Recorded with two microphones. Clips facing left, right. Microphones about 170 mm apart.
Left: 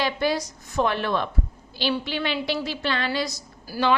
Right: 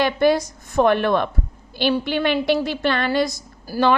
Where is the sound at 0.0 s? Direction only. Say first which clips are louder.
Right 7 dB; 55° right (ahead or behind).